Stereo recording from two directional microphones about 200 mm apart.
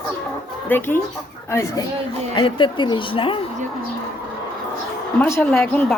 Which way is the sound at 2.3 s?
25° left (ahead or behind).